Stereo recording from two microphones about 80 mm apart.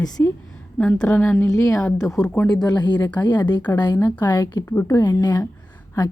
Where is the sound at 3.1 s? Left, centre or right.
Left.